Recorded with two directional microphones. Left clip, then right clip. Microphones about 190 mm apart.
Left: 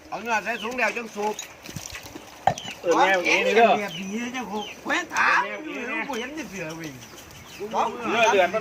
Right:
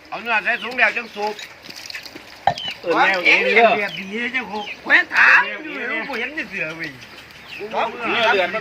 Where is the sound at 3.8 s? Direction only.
40° left (ahead or behind).